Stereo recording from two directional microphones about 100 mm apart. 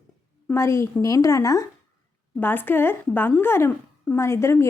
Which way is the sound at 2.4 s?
20° left (ahead or behind).